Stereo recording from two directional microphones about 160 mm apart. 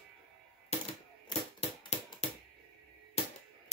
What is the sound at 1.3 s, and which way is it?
Typewriter, 40° left (ahead or behind).